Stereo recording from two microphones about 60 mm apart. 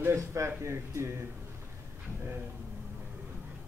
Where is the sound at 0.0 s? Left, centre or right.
Right.